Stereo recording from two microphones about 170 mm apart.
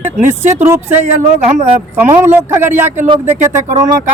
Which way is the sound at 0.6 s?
10° right (ahead or behind).